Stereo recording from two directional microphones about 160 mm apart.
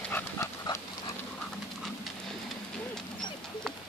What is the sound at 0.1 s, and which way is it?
Dog, 20° left (ahead or behind).